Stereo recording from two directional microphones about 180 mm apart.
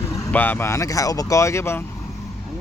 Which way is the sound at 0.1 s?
10° left (ahead or behind).